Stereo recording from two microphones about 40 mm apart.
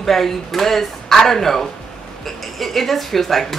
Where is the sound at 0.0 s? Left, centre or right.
Centre.